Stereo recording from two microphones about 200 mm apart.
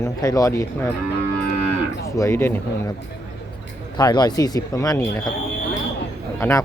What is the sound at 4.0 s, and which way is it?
Speech, 20° left (ahead or behind).